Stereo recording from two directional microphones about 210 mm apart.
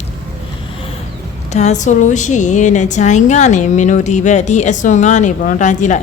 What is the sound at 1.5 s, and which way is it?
A woman's voice, 35° left (ahead or behind).